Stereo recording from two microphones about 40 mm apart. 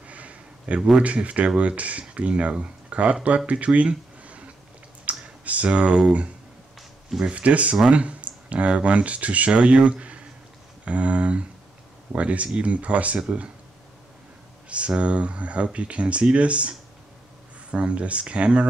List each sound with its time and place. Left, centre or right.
0.0 s a sound: right
0.7 s speech: centre
1.0 s speech: right
4.2 s a sound: right
5.1 s computer keyboard: right
5.4 s speech: right
7.2 s speech: right
7.9 s clicking: right
8.6 s speech: right
15.0 s speech: right